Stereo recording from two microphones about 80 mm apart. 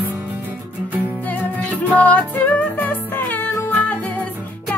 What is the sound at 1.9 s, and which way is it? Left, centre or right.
Music, centre.